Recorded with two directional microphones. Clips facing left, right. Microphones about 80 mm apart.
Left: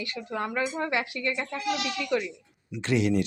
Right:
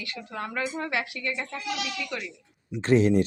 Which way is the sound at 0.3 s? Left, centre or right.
Left.